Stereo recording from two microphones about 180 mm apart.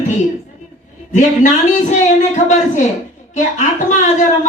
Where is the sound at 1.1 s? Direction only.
45° left (ahead or behind).